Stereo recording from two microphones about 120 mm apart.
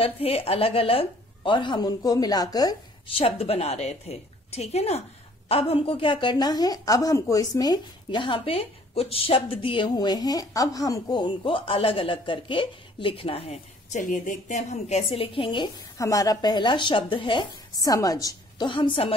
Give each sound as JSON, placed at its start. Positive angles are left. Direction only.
{"t": 0.0, "sound": "a woman's voice", "side_deg": 55}
{"t": 3.2, "sound": "a woman's voice", "side_deg": 50}
{"t": 5.5, "sound": "a woman's voice", "side_deg": 50}
{"t": 16.0, "sound": "a woman's voice", "side_deg": 30}
{"t": 17.7, "sound": "a woman's voice", "side_deg": 30}
{"t": 18.7, "sound": "a woman's voice", "side_deg": 45}